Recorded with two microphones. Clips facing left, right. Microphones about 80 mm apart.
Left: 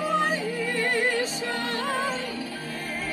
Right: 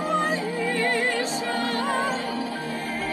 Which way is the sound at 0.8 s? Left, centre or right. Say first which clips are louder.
Left 1 dB; centre.